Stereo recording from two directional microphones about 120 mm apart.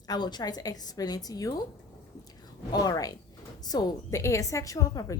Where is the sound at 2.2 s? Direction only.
30° left (ahead or behind).